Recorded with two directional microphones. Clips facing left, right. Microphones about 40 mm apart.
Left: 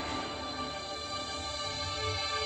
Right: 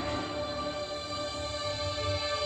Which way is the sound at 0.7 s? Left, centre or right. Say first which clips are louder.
Right 3 dB; centre.